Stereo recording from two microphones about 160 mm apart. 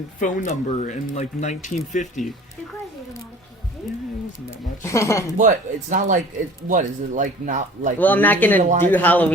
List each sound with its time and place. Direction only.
0.2 s speech: 50° left (ahead or behind)
4.8 s speech: 20° left (ahead or behind)
5.4 s speech: 50° right (ahead or behind)
7.9 s speech: 10° left (ahead or behind)
8.5 s speech: 50° right (ahead or behind)
8.9 s speech: 10° left (ahead or behind)